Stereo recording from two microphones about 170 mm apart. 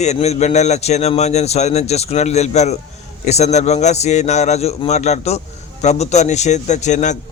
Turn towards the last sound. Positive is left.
turn(degrees=45)  # may be behind; listen again after turning